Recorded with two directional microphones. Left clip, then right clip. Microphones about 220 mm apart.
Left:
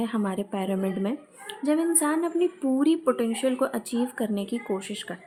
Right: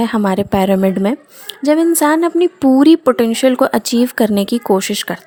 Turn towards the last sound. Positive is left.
turn(degrees=-50)  # may be behind; listen again after turning